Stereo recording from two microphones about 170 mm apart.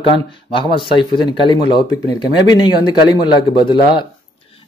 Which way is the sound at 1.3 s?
30° left (ahead or behind).